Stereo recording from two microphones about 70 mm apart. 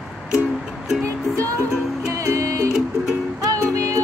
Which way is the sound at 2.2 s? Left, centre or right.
Right.